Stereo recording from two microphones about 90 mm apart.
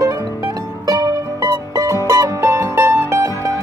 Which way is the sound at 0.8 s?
40° right (ahead or behind).